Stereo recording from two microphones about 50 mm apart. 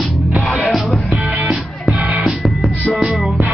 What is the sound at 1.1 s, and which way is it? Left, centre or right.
Music, right.